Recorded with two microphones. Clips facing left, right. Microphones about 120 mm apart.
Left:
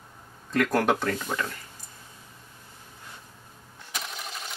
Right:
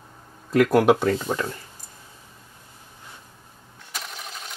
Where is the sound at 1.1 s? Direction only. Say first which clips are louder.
Right 5 dB; 25° right (ahead or behind).